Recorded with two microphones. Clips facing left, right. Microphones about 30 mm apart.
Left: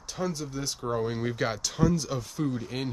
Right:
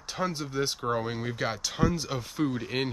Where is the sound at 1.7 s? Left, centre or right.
Right.